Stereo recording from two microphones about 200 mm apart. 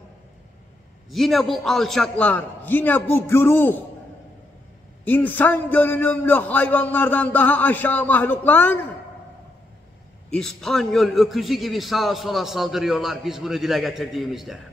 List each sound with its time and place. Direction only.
1.1 s a man's voice: centre (ahead or behind)
5.0 s a man's voice: 10° left (ahead or behind)
10.3 s a man's voice: centre (ahead or behind)